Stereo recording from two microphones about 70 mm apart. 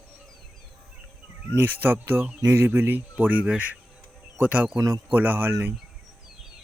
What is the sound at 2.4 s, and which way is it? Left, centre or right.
Speech, right.